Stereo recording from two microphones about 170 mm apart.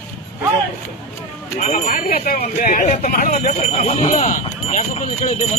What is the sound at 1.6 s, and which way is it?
Speech, 50° left (ahead or behind).